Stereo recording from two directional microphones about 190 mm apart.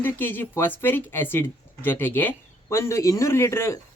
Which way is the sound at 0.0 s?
10° left (ahead or behind).